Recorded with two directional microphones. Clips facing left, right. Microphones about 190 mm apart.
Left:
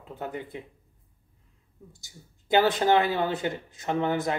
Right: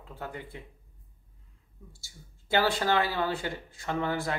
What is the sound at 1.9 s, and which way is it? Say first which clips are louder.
Speech: left 3 dB; 20° left (ahead or behind).